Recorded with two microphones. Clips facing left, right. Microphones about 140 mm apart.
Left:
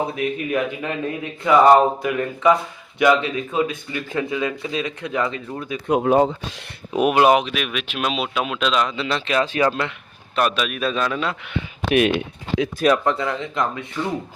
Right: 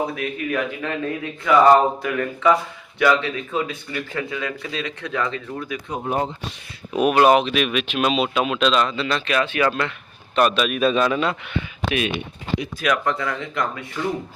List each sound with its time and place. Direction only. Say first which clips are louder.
0.2 s speech: left 2 dB; 20° left (ahead or behind)
5.9 s speech: left 10 dB; 80° left
6.9 s speech: even; 20° left (ahead or behind)
9.6 s speech: left 1 dB; 20° left (ahead or behind)
10.3 s a man's voice: right 3 dB; 5° left (ahead or behind)
11.9 s speech: left 7 dB; 65° left (ahead or behind)
12.8 s speech: left 4 dB; 25° left (ahead or behind)